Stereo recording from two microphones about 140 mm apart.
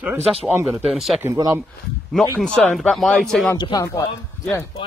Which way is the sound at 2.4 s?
5° left (ahead or behind).